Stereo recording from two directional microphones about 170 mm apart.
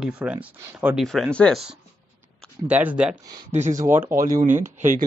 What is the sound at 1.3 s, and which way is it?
Speech, 5° left (ahead or behind).